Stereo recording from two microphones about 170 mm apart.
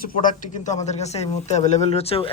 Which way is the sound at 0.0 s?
55° left (ahead or behind).